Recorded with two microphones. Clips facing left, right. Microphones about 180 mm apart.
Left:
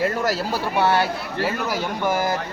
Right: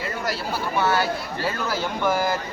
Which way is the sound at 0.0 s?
40° left (ahead or behind).